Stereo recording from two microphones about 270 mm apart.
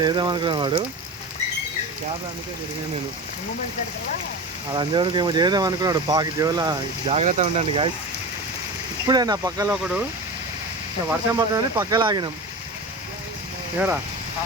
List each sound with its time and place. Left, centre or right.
0.0 s speech: centre
4.7 s speech: centre
9.0 s speech: centre
11.1 s speech: centre
13.7 s speech: centre